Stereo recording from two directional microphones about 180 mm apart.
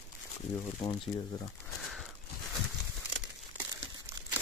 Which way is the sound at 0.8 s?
25° left (ahead or behind).